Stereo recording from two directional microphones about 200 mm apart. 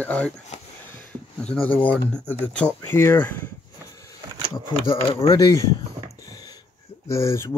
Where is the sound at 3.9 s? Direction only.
15° left (ahead or behind).